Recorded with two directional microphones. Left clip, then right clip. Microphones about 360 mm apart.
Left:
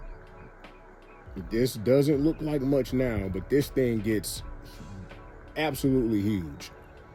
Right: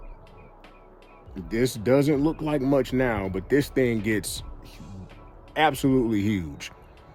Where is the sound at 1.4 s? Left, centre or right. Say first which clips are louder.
Right 2 dB; centre.